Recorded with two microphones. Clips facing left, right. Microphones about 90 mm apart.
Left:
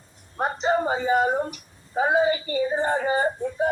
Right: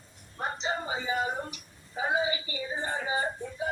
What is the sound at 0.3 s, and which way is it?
A woman's voice, 55° left (ahead or behind).